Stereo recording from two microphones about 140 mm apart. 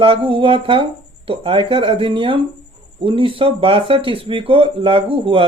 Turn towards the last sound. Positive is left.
turn(degrees=-40)  # may be behind; listen again after turning